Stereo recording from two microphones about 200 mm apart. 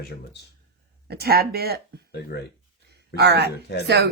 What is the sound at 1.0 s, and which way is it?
Speech, 50° right (ahead or behind).